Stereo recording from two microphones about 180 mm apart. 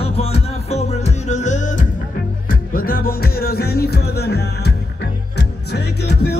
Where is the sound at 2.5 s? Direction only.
55° left (ahead or behind).